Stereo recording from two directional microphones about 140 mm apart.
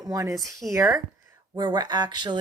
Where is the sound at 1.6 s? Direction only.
35° right (ahead or behind).